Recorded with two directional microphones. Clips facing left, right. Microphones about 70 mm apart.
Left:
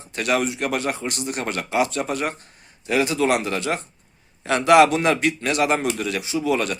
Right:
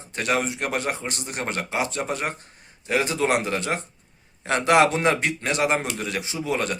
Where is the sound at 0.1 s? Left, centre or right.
Right.